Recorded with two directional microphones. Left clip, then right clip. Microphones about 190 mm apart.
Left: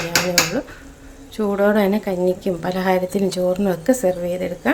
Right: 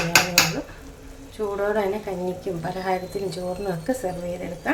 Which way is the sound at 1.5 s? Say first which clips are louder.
Left 7 dB; 60° left (ahead or behind).